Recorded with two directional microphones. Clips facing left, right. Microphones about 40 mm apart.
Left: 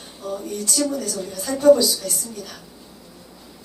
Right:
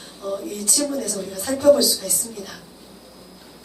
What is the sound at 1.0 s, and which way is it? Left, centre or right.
A woman's voice, right.